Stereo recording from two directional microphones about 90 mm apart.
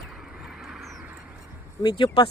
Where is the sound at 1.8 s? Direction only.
55° left (ahead or behind).